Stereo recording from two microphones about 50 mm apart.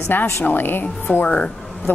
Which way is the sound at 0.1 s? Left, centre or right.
Left.